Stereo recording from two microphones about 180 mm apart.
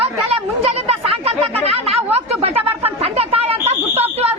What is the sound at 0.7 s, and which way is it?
Chatter, 35° right (ahead or behind).